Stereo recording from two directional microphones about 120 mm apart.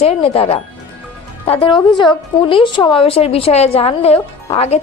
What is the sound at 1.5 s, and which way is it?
A woman's voice, 45° left (ahead or behind).